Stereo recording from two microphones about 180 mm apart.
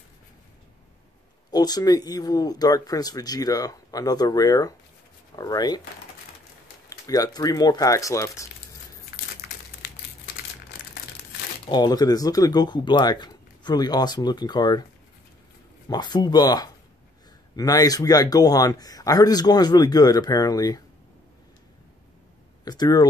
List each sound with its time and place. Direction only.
1.5 s speech: 20° left (ahead or behind)
6.9 s speech: 20° left (ahead or behind)
11.7 s speech: 20° left (ahead or behind)
15.9 s speech: 25° left (ahead or behind)
22.7 s speech: 20° left (ahead or behind)